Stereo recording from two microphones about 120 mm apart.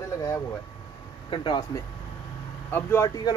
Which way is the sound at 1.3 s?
40° left (ahead or behind).